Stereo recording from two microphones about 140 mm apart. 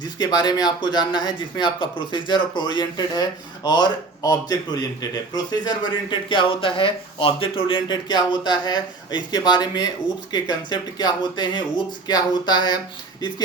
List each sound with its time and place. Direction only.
0.2 s speech: 30° left (ahead or behind)